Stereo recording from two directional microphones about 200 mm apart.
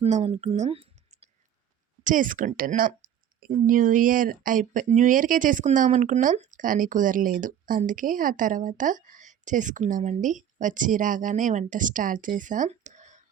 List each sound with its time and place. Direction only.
0.0 s speech: 30° right (ahead or behind)
2.0 s speech: 40° right (ahead or behind)